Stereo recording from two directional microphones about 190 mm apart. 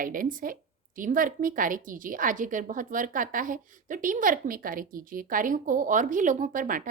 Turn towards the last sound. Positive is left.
turn(degrees=-45)  # may be behind; listen again after turning